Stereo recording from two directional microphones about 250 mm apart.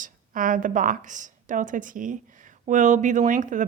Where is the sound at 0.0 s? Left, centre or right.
Right.